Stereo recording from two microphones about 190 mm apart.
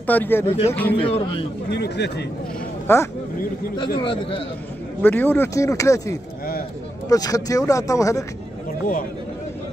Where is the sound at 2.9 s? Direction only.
10° left (ahead or behind).